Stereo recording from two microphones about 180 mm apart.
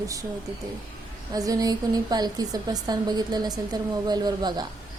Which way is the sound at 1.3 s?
20° right (ahead or behind).